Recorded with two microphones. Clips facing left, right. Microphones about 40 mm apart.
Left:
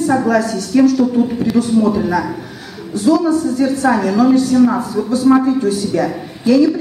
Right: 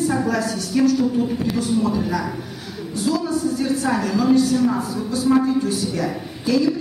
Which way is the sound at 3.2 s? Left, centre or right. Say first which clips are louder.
Left 7 dB; left.